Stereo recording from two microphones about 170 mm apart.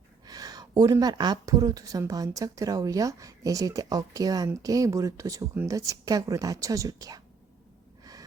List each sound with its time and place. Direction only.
0.3 s speech: 20° right (ahead or behind)